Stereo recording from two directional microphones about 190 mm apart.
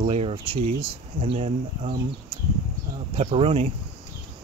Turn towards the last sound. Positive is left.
turn(degrees=-30)  # may be behind; listen again after turning